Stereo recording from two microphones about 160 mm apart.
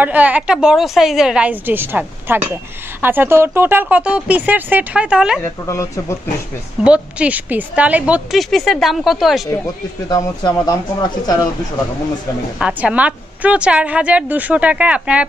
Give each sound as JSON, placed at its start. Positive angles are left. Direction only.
{"t": 0.0, "sound": "a woman's voice", "side_deg": -10}
{"t": 5.4, "sound": "speech", "side_deg": 15}
{"t": 6.8, "sound": "a woman's voice", "side_deg": -5}
{"t": 10.0, "sound": "speech", "side_deg": 25}
{"t": 12.5, "sound": "a woman's voice", "side_deg": -5}